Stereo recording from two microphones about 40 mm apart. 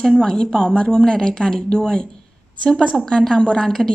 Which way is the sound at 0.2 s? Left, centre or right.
Centre.